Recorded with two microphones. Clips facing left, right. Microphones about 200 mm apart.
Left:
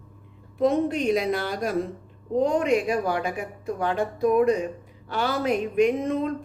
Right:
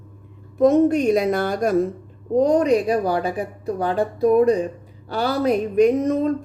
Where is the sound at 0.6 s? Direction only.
45° right (ahead or behind).